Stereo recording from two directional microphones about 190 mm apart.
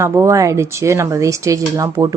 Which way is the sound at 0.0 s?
15° right (ahead or behind).